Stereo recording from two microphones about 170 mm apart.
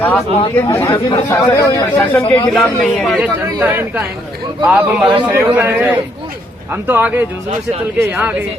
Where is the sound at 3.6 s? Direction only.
10° right (ahead or behind).